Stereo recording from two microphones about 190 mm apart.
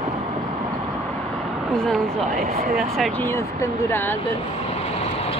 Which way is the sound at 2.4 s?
35° right (ahead or behind).